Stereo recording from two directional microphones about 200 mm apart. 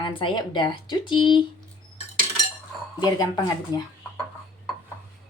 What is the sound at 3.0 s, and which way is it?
Speech, 20° left (ahead or behind).